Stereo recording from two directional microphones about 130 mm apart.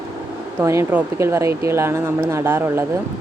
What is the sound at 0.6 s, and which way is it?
Speech, 20° right (ahead or behind).